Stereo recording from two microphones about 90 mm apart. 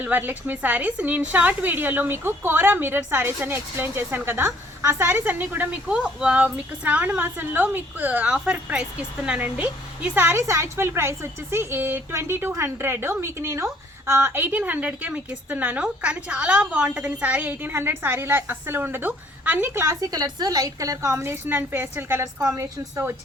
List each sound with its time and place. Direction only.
0.0 s a woman's voice: 20° right (ahead or behind); by 23.0 s 35° right (ahead or behind)